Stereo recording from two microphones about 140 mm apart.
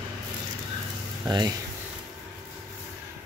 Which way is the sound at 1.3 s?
30° right (ahead or behind).